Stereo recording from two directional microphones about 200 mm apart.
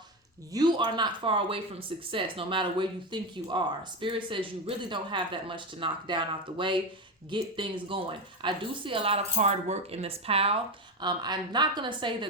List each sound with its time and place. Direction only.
0.5 s speech: 20° right (ahead or behind)